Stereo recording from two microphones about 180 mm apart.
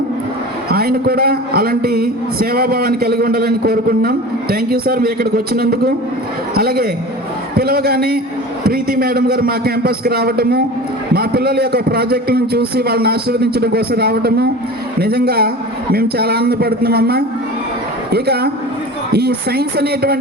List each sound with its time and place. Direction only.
0.7 s a man's voice: 55° right (ahead or behind)